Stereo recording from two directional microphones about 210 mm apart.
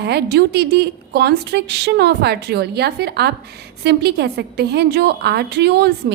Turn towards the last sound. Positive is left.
turn(degrees=-50)  # may be behind; listen again after turning